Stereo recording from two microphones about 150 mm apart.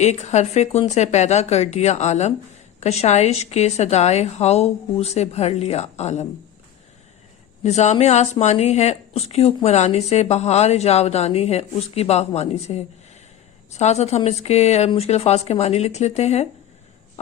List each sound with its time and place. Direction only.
0.0 s speech: 50° left (ahead or behind)
7.6 s speech: 50° left (ahead or behind)